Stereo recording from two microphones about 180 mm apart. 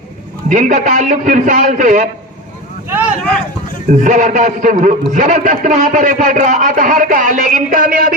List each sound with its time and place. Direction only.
0.4 s a man's voice: 45° right (ahead or behind)
3.8 s a man's voice: 45° right (ahead or behind)